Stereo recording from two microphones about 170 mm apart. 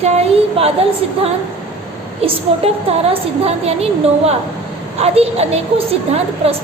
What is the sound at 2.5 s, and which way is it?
A woman's voice, 35° right (ahead or behind).